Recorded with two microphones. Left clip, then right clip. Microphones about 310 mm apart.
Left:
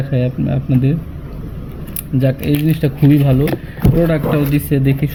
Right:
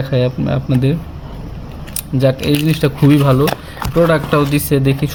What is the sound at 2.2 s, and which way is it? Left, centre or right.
Speech, centre.